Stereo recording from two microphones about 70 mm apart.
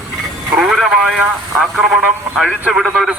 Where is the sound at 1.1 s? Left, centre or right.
Centre.